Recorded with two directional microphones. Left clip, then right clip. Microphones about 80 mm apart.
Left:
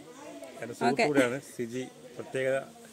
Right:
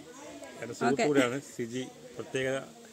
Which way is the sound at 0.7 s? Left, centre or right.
Left.